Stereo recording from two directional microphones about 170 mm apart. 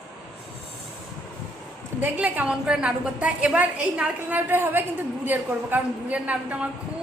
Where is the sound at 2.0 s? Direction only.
10° right (ahead or behind).